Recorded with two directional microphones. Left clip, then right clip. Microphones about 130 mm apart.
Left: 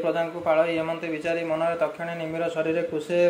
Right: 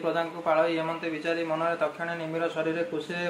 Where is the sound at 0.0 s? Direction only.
15° left (ahead or behind).